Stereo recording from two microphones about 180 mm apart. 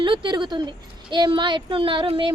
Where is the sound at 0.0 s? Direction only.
25° right (ahead or behind).